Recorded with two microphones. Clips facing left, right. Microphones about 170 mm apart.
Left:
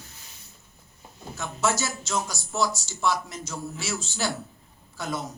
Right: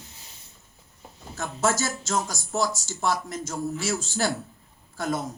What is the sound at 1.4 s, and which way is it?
Speech, 50° right (ahead or behind).